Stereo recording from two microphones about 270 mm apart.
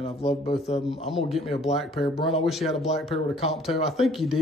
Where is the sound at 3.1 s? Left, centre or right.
Left.